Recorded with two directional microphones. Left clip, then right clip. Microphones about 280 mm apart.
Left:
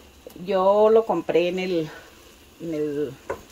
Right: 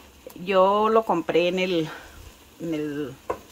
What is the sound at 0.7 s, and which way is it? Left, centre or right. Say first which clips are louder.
Speech: left 3 dB; centre.